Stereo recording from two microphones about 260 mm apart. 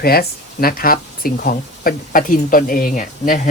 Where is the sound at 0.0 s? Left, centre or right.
Left.